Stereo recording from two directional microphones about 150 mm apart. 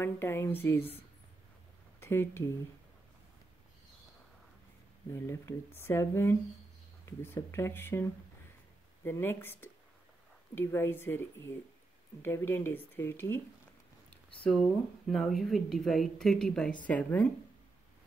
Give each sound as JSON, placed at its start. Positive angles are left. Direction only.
{"t": 0.0, "sound": "speech", "side_deg": 15}
{"t": 2.0, "sound": "speech", "side_deg": 15}
{"t": 5.1, "sound": "speech", "side_deg": 20}
{"t": 14.4, "sound": "speech", "side_deg": 0}